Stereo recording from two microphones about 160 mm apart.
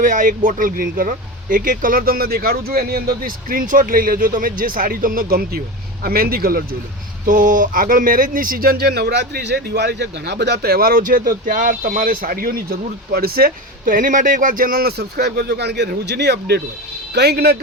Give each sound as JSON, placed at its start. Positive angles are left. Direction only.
{"t": 0.0, "sound": "speech", "side_deg": -55}
{"t": 7.3, "sound": "speech", "side_deg": -55}